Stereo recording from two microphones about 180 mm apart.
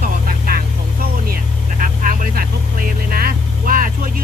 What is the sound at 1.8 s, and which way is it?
Vehicle, 50° right (ahead or behind).